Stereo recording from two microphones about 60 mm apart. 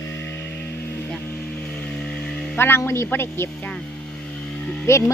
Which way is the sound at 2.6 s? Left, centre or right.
Left.